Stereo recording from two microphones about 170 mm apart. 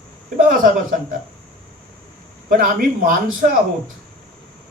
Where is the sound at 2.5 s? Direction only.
55° right (ahead or behind).